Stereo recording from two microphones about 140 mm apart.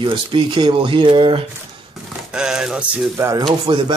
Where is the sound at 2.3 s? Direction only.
5° right (ahead or behind).